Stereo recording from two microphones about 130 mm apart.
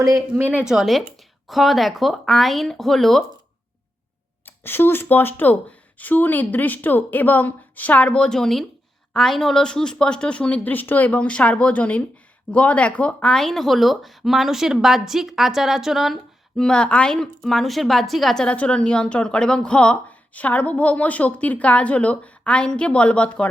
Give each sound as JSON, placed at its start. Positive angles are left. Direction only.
{"t": 0.3, "sound": "a woman's voice", "side_deg": -15}
{"t": 0.6, "sound": "speech", "side_deg": 0}
{"t": 4.4, "sound": "a woman's voice", "side_deg": 15}